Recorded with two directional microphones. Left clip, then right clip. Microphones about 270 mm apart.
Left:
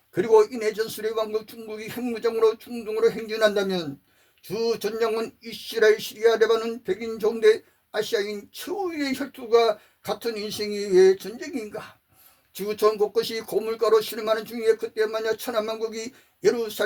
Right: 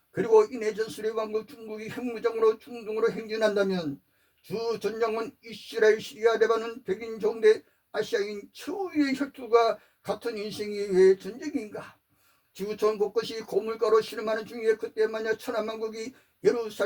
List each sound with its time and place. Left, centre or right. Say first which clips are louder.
0.1 s speech: left 3 dB; left